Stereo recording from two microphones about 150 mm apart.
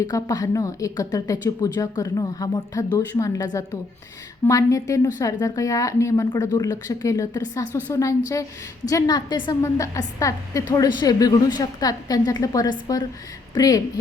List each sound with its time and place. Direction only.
0.0 s a woman's voice: 25° left (ahead or behind)